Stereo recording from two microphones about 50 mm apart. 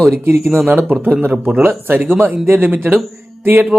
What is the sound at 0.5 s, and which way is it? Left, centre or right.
Speech, right.